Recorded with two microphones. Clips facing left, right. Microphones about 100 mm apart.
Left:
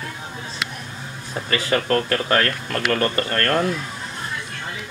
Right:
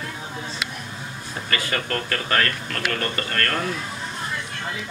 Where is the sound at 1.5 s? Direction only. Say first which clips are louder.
Left 6 dB; 25° left (ahead or behind).